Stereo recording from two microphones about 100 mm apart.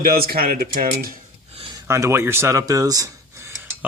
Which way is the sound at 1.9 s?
25° right (ahead or behind).